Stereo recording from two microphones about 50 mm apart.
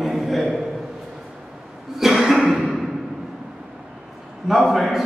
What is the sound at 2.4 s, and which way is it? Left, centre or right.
Music, right.